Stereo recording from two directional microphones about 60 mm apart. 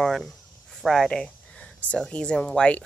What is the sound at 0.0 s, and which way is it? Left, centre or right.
Speech, centre.